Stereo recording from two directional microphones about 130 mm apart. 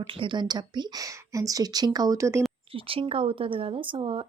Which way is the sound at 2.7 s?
45° right (ahead or behind).